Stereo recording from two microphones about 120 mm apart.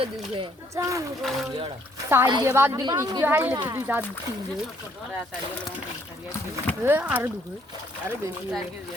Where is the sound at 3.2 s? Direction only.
15° right (ahead or behind).